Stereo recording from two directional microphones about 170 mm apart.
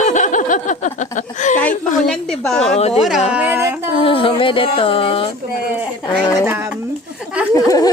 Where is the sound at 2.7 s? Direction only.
40° left (ahead or behind).